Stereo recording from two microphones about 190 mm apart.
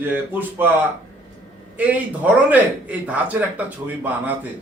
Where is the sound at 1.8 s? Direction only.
10° right (ahead or behind).